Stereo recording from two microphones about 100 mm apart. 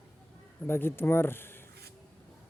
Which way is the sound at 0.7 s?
20° left (ahead or behind).